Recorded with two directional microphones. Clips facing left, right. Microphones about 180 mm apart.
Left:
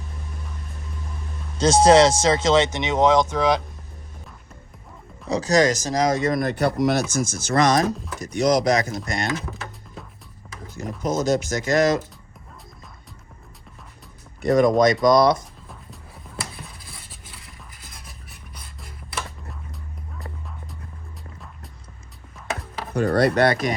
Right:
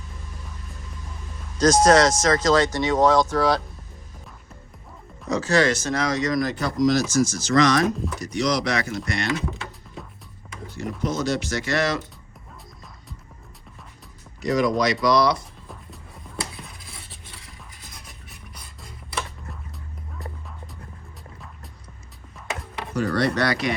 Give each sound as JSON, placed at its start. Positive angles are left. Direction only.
{"t": 1.5, "sound": "speech", "side_deg": 30}
{"t": 5.3, "sound": "speech", "side_deg": 40}
{"t": 7.9, "sound": "speech", "side_deg": 0}
{"t": 8.2, "sound": "speech", "side_deg": 50}
{"t": 9.3, "sound": "music", "side_deg": 0}
{"t": 11.0, "sound": "speech", "side_deg": 45}
{"t": 14.4, "sound": "speech", "side_deg": 50}
{"t": 15.7, "sound": "music", "side_deg": 0}
{"t": 23.0, "sound": "speech", "side_deg": 55}